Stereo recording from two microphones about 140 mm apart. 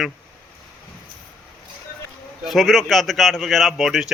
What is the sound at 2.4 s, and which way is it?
Speech, centre (ahead or behind).